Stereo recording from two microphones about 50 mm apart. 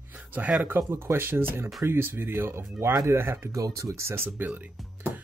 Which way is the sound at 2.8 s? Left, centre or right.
Right.